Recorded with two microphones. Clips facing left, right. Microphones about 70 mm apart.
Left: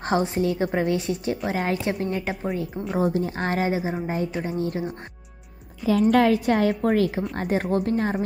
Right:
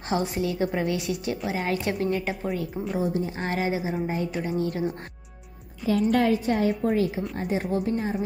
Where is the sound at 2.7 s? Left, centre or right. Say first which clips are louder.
Left 1 dB; centre.